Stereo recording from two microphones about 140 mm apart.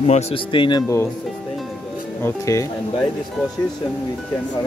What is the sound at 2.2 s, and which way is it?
Speech, 20° left (ahead or behind).